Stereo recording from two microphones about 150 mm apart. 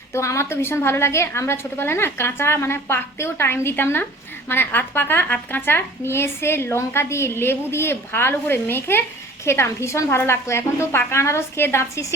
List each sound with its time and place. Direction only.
0.1 s speech: 20° left (ahead or behind)